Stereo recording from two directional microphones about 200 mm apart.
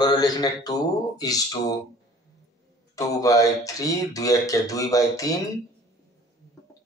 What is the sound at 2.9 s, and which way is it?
Speech, 15° left (ahead or behind).